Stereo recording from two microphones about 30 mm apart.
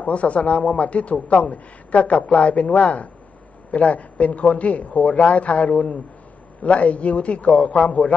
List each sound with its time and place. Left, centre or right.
0.0 s speech: left